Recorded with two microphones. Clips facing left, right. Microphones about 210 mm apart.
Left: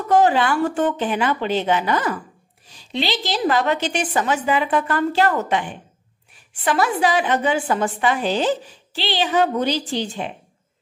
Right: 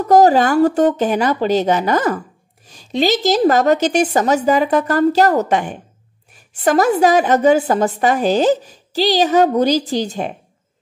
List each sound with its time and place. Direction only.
0.1 s a woman's voice: 40° right (ahead or behind)